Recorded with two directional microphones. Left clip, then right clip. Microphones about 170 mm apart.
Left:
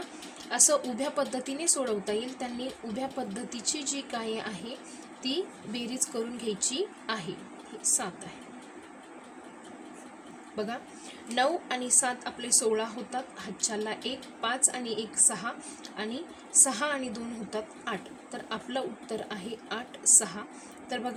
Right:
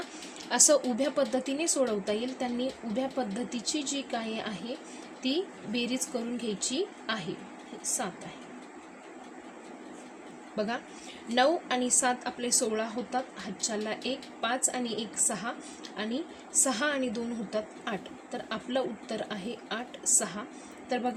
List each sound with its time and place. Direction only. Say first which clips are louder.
0.5 s a woman's voice: right 2 dB; 40° right (ahead or behind)
10.5 s a woman's voice: right 2 dB; 35° right (ahead or behind)